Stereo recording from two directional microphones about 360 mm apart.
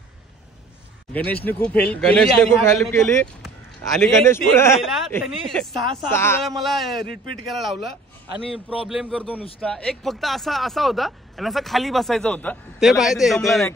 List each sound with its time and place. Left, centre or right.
1.1 s speech: centre
8.8 s speech: centre